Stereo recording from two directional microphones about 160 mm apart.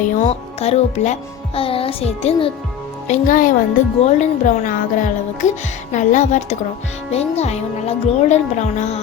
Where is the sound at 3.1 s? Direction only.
55° left (ahead or behind).